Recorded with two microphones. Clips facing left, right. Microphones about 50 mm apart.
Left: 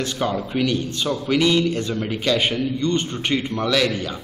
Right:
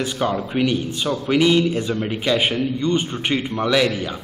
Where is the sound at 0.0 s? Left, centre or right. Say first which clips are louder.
Right 2 dB; centre.